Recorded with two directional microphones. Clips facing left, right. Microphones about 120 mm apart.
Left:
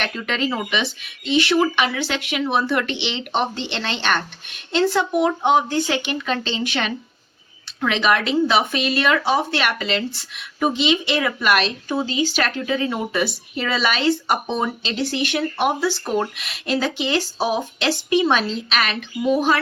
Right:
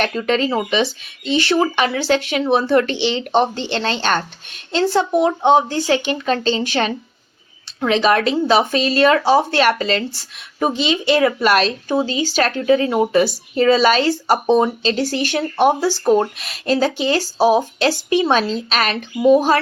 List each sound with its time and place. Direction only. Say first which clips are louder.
0.0 s speech: right 6 dB; 35° right (ahead or behind)